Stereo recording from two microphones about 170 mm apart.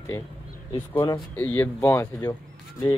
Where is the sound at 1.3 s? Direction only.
10° left (ahead or behind).